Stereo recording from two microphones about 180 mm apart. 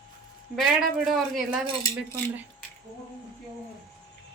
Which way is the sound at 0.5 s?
Centre (ahead or behind).